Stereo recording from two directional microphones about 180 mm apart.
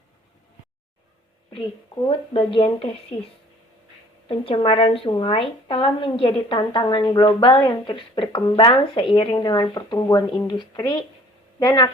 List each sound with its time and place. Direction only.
2.0 s a woman's voice: 30° left (ahead or behind)
4.3 s a woman's voice: 30° left (ahead or behind)